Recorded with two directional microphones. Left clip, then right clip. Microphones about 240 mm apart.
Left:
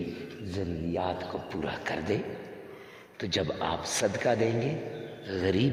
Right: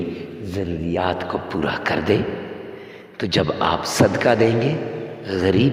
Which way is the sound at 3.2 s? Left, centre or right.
Right.